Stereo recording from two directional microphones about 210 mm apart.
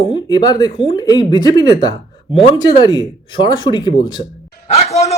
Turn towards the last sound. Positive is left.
turn(degrees=30)  # may be behind; listen again after turning